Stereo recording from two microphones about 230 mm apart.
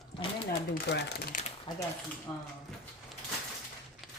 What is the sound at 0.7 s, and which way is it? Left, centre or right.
Speech, left.